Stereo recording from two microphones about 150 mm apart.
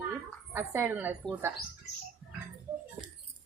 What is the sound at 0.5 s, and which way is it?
Speech, 15° right (ahead or behind).